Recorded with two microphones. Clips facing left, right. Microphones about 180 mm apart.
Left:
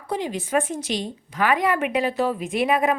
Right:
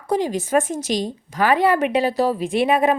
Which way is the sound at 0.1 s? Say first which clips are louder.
Right 5 dB; 40° right (ahead or behind).